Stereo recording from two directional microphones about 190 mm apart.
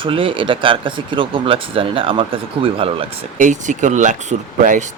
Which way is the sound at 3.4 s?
40° right (ahead or behind).